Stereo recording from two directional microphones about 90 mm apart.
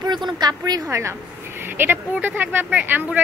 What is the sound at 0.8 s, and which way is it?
A woman's voice, 30° right (ahead or behind).